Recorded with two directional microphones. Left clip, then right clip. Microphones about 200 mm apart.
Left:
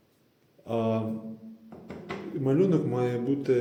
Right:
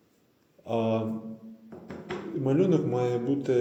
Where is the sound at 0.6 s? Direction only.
20° left (ahead or behind).